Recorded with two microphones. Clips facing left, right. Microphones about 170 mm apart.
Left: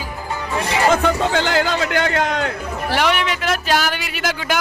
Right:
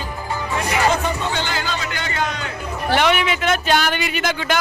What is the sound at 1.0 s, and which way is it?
A man's voice, 85° left.